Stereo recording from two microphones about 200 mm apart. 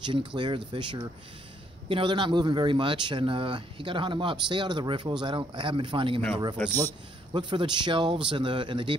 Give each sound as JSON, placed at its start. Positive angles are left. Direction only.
{"t": 0.0, "sound": "a man's voice", "side_deg": -25}
{"t": 7.3, "sound": "a man's voice", "side_deg": -25}